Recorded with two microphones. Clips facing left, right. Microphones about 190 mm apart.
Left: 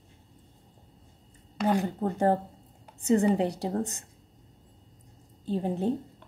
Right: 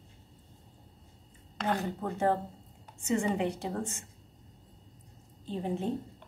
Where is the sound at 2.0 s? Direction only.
35° left (ahead or behind).